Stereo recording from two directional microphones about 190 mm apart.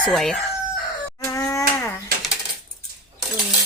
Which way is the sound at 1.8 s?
15° left (ahead or behind).